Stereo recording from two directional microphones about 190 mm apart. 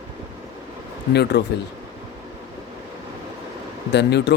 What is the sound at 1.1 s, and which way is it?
Speech, 60° left (ahead or behind).